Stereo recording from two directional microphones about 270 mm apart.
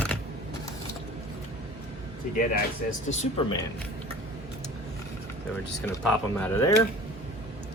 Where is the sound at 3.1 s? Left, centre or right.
Left.